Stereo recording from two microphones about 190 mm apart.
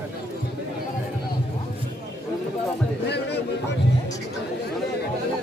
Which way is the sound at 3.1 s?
60° left (ahead or behind).